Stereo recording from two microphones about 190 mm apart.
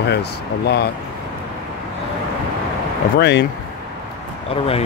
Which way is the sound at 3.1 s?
65° left (ahead or behind).